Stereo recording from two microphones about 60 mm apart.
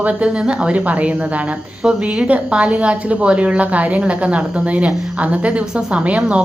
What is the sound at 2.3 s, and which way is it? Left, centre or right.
A woman's voice, centre.